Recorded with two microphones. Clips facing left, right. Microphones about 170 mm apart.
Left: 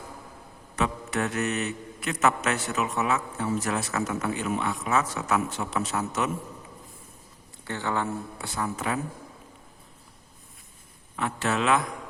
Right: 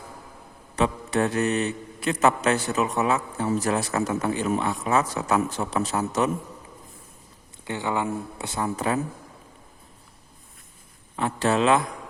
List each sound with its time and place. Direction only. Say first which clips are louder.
0.8 s a man's voice: right 5 dB; 30° right (ahead or behind)
7.6 s speech: right 2 dB; 15° right (ahead or behind); by 9.0 s 35° right (ahead or behind)
11.2 s a man's voice: right 5 dB; 30° right (ahead or behind)